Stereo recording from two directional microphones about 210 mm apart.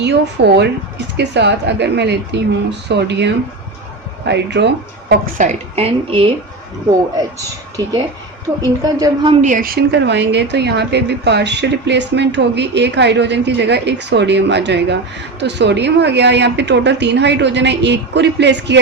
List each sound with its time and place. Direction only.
0.0 s a woman's voice: 50° right (ahead or behind); by 6.3 s 25° right (ahead or behind)
8.6 s a woman's voice: 15° right (ahead or behind)
9.4 s a woman's voice: 40° right (ahead or behind); by 18.8 s 55° right (ahead or behind)